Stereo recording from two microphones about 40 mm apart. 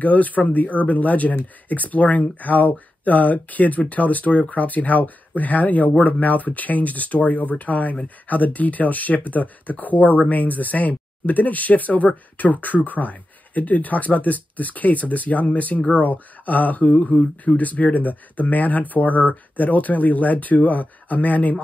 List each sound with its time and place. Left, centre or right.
0.0 s speech: left